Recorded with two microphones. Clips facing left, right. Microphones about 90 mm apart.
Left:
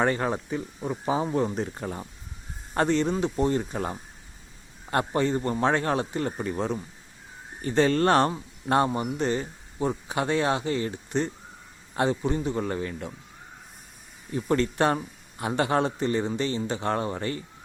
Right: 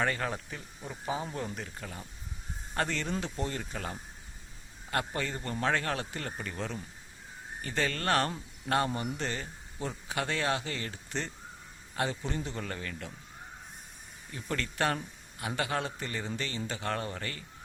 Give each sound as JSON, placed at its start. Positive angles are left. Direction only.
{"t": 0.0, "sound": "speech", "side_deg": 25}
{"t": 2.7, "sound": "speech", "side_deg": 25}
{"t": 12.0, "sound": "speech", "side_deg": 30}
{"t": 14.3, "sound": "speech", "side_deg": 25}